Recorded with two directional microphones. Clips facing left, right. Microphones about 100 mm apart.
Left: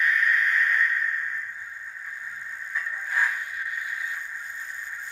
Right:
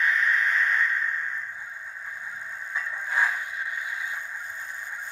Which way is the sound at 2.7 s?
20° right (ahead or behind).